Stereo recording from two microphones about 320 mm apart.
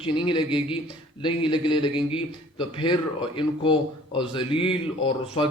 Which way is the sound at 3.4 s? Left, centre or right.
Centre.